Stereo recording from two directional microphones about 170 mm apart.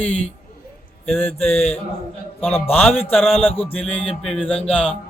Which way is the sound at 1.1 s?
10° left (ahead or behind).